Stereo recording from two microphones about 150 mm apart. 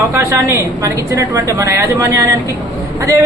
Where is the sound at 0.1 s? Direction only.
15° right (ahead or behind).